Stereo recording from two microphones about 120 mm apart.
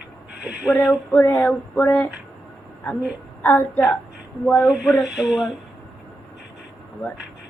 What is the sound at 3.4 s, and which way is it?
A woman's voice, 15° left (ahead or behind).